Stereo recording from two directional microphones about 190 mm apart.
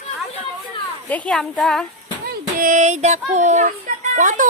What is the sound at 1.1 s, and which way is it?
Speech, 5° left (ahead or behind).